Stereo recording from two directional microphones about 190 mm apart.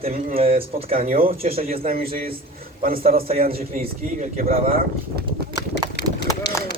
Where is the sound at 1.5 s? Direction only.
50° right (ahead or behind).